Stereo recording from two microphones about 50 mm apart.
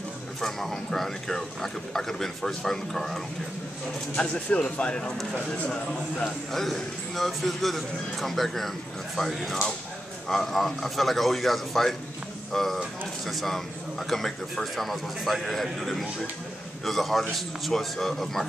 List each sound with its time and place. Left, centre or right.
0.4 s speech: centre
4.2 s speech: left
6.5 s a man's voice: centre